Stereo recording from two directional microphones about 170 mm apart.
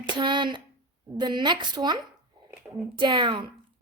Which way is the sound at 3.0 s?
30° right (ahead or behind).